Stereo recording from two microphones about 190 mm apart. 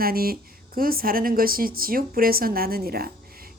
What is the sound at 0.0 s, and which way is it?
Speech, 50° right (ahead or behind).